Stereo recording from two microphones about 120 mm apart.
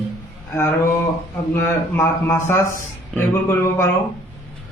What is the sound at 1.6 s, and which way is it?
A man's voice, 20° left (ahead or behind).